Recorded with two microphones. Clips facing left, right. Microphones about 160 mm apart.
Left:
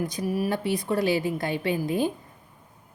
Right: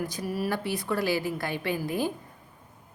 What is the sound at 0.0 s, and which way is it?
A woman's voice, 15° left (ahead or behind).